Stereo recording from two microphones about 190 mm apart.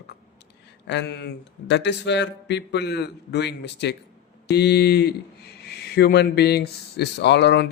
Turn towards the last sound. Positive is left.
turn(degrees=65)  # may be behind; listen again after turning